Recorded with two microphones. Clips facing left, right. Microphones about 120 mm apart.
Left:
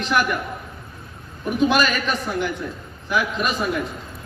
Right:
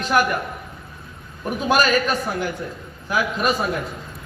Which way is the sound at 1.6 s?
40° right (ahead or behind).